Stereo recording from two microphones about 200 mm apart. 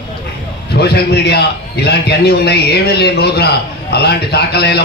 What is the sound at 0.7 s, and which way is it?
A man's voice, 55° left (ahead or behind).